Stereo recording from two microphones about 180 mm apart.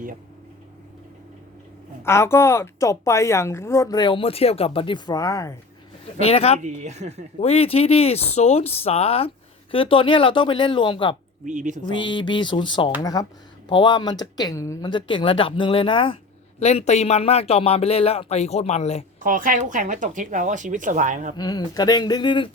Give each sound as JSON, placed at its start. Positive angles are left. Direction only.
{"t": 2.0, "sound": "a woman's voice", "side_deg": 15}
{"t": 6.1, "sound": "speech", "side_deg": 35}
{"t": 6.6, "sound": "speech", "side_deg": -40}
{"t": 7.3, "sound": "speech", "side_deg": 35}
{"t": 11.4, "sound": "speech", "side_deg": -45}
{"t": 12.0, "sound": "speech", "side_deg": 25}
{"t": 19.2, "sound": "speech", "side_deg": -50}
{"t": 21.3, "sound": "speech", "side_deg": 20}